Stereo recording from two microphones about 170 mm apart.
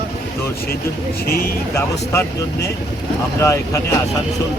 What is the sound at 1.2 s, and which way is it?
Speech, 60° left (ahead or behind).